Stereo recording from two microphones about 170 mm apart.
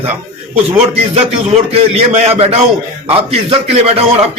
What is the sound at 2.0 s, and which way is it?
A man's voice, 35° right (ahead or behind).